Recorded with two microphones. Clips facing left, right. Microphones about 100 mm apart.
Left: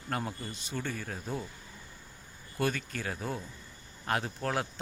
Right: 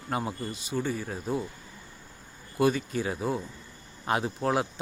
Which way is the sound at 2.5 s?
15° right (ahead or behind).